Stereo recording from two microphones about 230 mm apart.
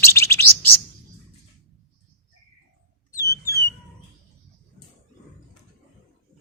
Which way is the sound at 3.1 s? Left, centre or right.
Centre.